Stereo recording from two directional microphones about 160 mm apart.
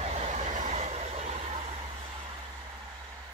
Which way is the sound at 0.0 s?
40° right (ahead or behind).